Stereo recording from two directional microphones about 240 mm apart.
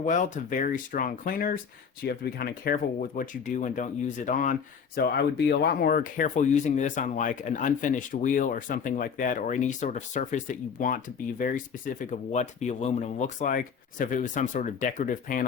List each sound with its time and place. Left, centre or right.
0.0 s speech: left